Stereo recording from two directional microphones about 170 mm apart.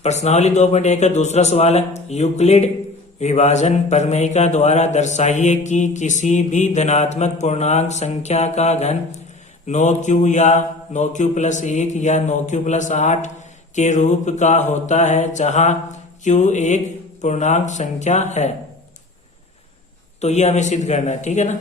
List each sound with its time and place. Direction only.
0.0 s speech: 40° left (ahead or behind)
3.2 s mantra: 40° left (ahead or behind)
20.2 s mantra: 40° left (ahead or behind)